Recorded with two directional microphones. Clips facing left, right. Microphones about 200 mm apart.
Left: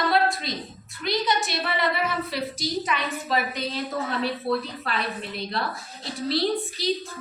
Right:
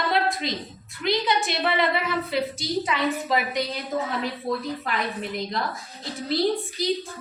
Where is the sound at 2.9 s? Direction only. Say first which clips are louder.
Right 3 dB; 20° right (ahead or behind).